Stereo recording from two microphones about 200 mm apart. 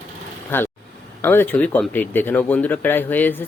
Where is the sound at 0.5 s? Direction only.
10° left (ahead or behind).